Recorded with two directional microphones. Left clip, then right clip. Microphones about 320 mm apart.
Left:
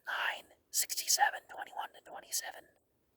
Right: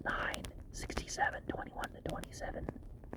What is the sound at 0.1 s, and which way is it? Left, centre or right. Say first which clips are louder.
Whispering: left 2 dB; left.